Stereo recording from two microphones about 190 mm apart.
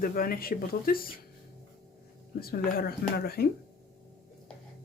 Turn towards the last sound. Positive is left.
turn(degrees=55)  # may be behind; listen again after turning